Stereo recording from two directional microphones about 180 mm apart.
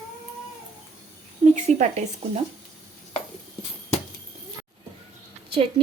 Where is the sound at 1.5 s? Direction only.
40° right (ahead or behind).